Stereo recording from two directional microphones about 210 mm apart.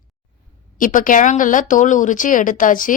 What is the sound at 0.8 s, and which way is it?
A woman's voice, 40° left (ahead or behind).